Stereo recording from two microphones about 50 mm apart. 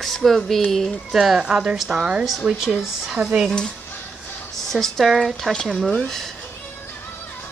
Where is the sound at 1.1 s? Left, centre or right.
Centre.